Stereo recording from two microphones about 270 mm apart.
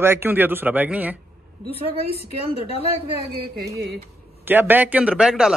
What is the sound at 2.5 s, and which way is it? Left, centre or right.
Speech, left.